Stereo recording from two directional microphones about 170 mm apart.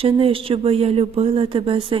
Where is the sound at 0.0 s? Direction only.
30° right (ahead or behind).